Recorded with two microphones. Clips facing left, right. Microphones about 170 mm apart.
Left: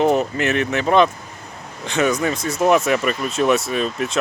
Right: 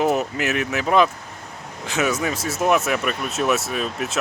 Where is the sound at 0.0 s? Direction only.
5° right (ahead or behind).